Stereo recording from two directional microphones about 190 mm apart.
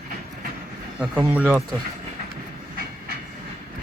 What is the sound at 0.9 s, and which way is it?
Speech, 10° right (ahead or behind).